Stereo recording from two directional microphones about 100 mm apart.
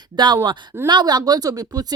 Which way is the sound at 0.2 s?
50° right (ahead or behind).